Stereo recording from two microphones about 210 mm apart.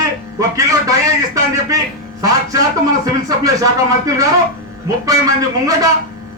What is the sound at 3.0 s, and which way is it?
A man's voice, 15° right (ahead or behind).